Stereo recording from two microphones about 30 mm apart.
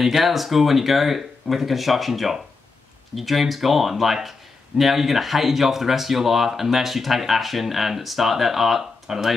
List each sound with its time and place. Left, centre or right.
0.0 s speech: centre